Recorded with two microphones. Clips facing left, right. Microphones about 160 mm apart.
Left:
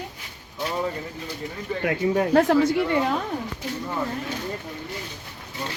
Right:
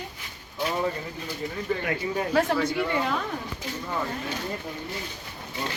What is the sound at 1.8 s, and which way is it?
Speech, 55° left (ahead or behind).